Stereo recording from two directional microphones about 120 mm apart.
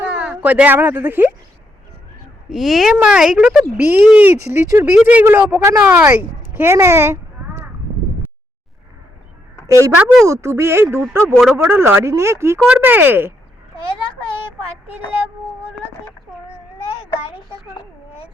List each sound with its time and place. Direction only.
0.0 s speech: 10° right (ahead or behind)
2.5 s speech: centre (ahead or behind)
4.5 s speech: 20° right (ahead or behind)
4.9 s speech: 10° right (ahead or behind)
9.6 s a woman's voice: 25° right (ahead or behind)
10.0 s speech: 5° right (ahead or behind)
10.2 s speech: 25° right (ahead or behind)